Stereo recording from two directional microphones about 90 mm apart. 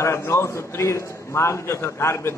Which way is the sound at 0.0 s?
30° left (ahead or behind).